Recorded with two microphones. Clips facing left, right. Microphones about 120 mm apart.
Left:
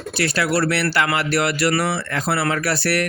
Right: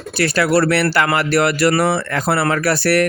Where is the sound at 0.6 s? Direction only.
50° right (ahead or behind).